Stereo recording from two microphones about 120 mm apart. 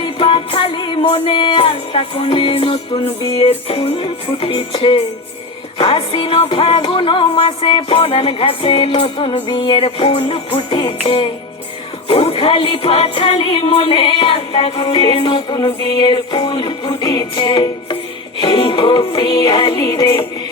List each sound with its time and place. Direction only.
0.0 s music: 45° left (ahead or behind)
2.9 s music: 30° left (ahead or behind)
3.4 s music: 50° left (ahead or behind); by 20.2 s 30° left (ahead or behind)